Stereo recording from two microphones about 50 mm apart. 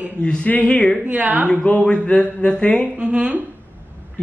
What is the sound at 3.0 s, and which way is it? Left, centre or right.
Speech, right.